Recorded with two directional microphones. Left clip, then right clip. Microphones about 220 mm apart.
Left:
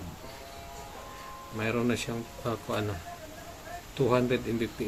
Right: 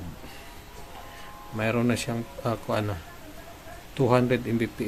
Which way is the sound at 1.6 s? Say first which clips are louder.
Right 4 dB; 25° right (ahead or behind).